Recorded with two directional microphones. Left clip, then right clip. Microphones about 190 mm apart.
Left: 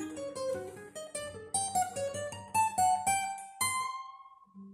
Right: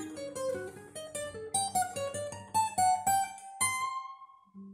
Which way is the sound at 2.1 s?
20° right (ahead or behind).